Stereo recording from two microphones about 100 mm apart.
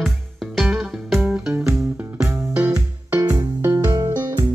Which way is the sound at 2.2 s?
20° right (ahead or behind).